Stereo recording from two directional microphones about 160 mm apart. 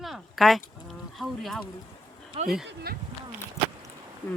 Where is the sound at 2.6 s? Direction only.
75° right (ahead or behind).